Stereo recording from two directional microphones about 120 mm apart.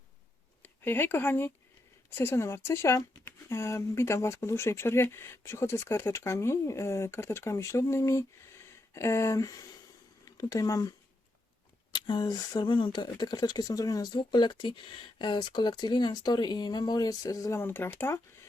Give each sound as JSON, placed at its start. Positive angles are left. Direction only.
{"t": 0.6, "sound": "speech", "side_deg": 15}